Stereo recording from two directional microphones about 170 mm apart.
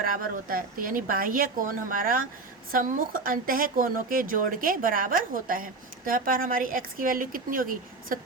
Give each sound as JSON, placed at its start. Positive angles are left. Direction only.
{"t": 0.0, "sound": "speech", "side_deg": -55}